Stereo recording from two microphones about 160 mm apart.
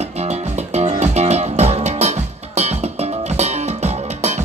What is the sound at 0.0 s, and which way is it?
Music, 45° right (ahead or behind).